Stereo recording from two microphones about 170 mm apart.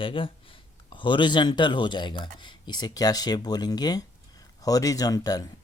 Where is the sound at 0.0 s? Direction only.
30° left (ahead or behind).